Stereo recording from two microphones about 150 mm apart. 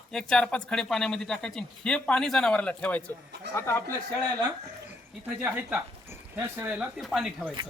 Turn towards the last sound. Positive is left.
turn(degrees=-5)  # may be behind; listen again after turning